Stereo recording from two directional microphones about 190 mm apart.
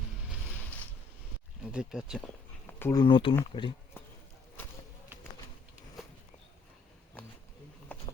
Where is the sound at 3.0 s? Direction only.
25° left (ahead or behind).